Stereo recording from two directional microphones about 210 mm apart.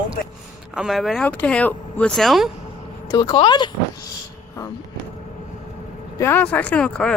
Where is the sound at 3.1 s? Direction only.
20° left (ahead or behind).